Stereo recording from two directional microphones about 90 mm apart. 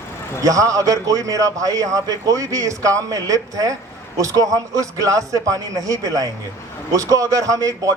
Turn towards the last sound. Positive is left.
turn(degrees=-40)  # may be behind; listen again after turning